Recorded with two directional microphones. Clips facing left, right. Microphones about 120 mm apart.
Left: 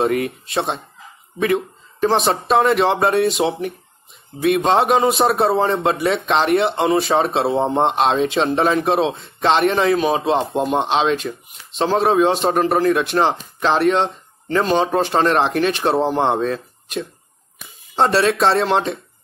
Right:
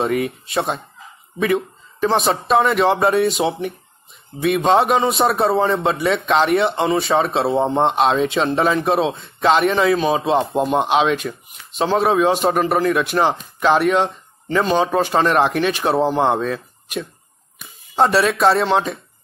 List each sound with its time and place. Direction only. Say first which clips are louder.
0.0 s speech: left 1 dB; centre (ahead or behind)